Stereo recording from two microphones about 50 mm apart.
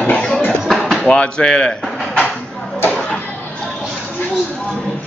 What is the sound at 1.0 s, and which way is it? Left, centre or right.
Speech, left.